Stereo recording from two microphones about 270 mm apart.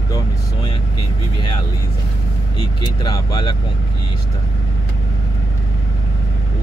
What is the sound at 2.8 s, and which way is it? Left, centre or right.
Speech, centre.